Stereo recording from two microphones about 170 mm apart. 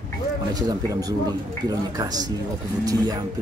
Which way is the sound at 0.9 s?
20° right (ahead or behind).